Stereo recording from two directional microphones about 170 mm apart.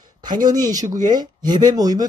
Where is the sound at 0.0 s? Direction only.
25° right (ahead or behind).